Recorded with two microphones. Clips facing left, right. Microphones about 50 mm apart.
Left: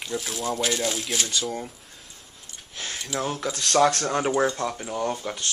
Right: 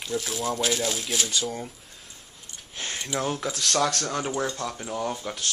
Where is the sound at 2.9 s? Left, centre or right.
Centre.